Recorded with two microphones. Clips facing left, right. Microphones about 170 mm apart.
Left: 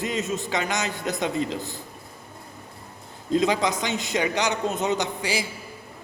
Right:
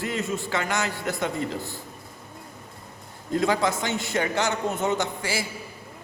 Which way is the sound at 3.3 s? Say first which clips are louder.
Left 1 dB; 20° left (ahead or behind).